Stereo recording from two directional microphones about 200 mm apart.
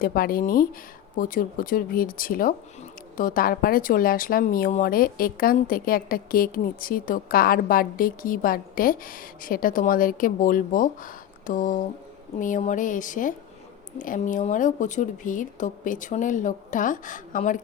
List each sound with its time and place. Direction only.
0.0 s speech: 45° left (ahead or behind)